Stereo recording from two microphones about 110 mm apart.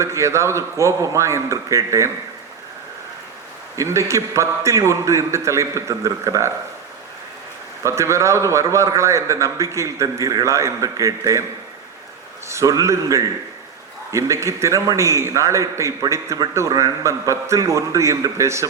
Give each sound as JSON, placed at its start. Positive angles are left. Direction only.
{"t": 0.0, "sound": "a man's voice", "side_deg": -25}
{"t": 3.8, "sound": "a man's voice", "side_deg": -25}
{"t": 7.9, "sound": "a man's voice", "side_deg": -25}
{"t": 12.5, "sound": "a man's voice", "side_deg": -30}